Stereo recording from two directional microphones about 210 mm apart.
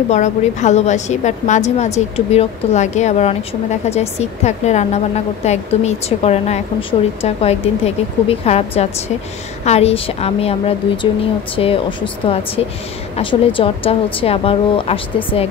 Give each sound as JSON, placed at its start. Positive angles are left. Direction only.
{"t": 0.1, "sound": "a woman's voice", "side_deg": 35}